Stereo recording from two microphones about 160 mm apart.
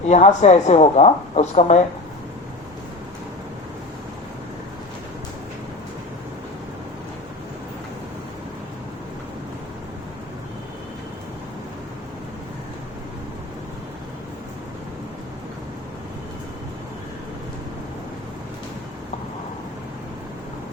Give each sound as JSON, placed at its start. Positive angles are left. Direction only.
{"t": 0.0, "sound": "a woman's voice", "side_deg": 45}